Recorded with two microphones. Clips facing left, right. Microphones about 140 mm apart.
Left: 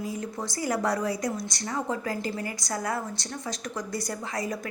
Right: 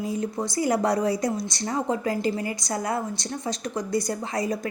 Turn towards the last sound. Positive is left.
turn(degrees=-25)  # may be behind; listen again after turning